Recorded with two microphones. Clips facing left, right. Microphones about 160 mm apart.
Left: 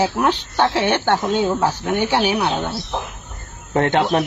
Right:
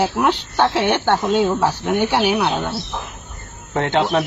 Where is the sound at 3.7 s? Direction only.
50° left (ahead or behind).